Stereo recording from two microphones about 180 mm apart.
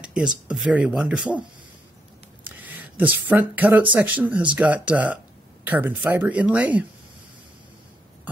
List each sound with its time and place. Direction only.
0.0 s a sound: 5° right (ahead or behind)
0.5 s speech: 5° right (ahead or behind)
3.0 s speech: 10° right (ahead or behind)